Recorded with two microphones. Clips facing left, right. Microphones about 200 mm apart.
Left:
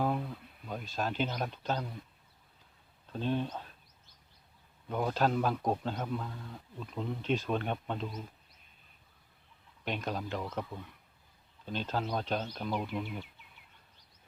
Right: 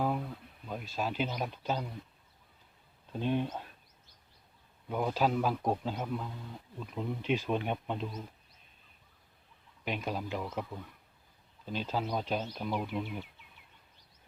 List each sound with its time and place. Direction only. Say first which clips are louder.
0.7 s a man's voice: even; 5° right (ahead or behind)
3.1 s speech: right 1 dB; 15° right (ahead or behind)
4.9 s a man's voice: even; 5° right (ahead or behind)
9.8 s a man's voice: even; 5° right (ahead or behind)